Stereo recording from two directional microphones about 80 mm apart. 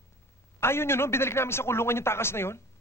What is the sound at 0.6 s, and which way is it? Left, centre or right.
A man's voice, left.